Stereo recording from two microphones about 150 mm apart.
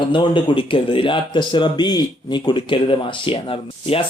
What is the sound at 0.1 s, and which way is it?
Speech, 35° left (ahead or behind).